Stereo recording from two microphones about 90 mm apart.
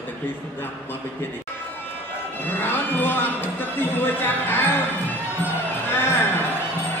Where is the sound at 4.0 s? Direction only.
25° left (ahead or behind).